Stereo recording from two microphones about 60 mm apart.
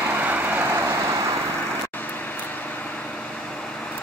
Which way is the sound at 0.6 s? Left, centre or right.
Right.